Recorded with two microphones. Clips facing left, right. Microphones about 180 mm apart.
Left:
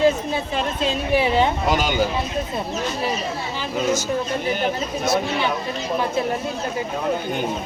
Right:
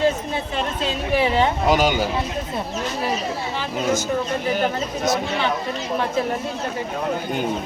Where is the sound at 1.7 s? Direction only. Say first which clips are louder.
Right 3 dB; 10° right (ahead or behind).